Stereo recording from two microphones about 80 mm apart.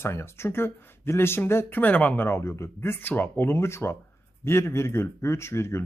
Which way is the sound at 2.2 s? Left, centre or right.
Left.